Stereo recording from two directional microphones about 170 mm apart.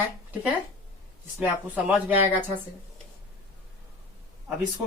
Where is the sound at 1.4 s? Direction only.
10° right (ahead or behind).